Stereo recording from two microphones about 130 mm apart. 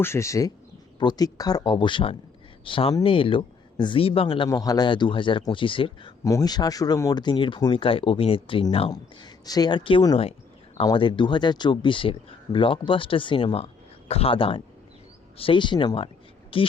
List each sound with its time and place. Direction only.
0.0 s speech: 20° left (ahead or behind); by 4.4 s 45° left (ahead or behind)
4.4 s speech: 30° left (ahead or behind)
6.2 s speech: 25° left (ahead or behind); by 8.6 s 45° left (ahead or behind)
8.9 s speech: 30° left (ahead or behind)